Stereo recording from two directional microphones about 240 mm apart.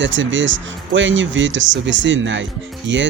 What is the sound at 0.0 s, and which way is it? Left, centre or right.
Speech, right.